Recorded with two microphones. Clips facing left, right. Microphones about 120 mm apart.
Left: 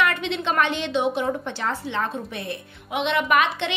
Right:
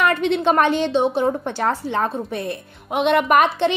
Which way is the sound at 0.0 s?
45° right (ahead or behind).